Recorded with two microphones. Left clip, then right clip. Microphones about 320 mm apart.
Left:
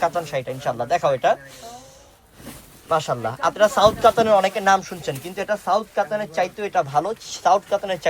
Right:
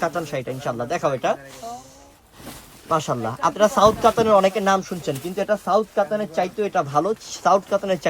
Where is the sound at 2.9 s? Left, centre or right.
Right.